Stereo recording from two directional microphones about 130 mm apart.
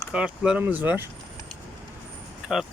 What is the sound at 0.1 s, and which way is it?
Speech, 5° right (ahead or behind).